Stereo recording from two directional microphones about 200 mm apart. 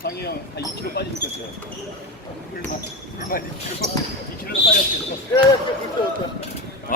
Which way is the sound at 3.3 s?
45° left (ahead or behind).